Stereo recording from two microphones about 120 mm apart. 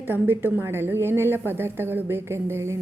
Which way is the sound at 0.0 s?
15° right (ahead or behind).